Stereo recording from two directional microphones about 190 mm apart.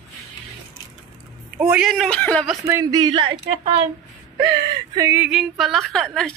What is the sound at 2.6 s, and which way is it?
Speech, 15° right (ahead or behind).